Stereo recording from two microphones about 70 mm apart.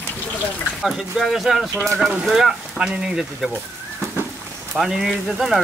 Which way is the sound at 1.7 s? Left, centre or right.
Centre.